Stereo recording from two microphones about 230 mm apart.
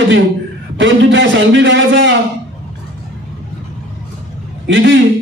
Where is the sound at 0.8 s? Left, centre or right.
Right.